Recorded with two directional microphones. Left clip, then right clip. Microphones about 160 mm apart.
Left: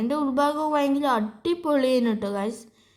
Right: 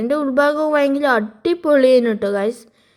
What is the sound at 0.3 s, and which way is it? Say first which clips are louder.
A woman's voice: right 8 dB; 20° right (ahead or behind).